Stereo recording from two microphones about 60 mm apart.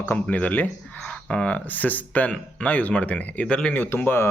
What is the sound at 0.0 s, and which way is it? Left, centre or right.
Speech, left.